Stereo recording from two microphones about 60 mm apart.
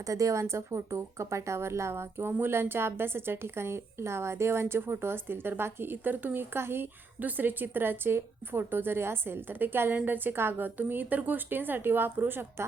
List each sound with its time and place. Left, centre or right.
0.1 s speech: right
7.2 s speech: right